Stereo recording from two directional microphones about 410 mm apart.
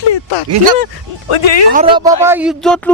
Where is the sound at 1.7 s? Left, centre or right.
Centre.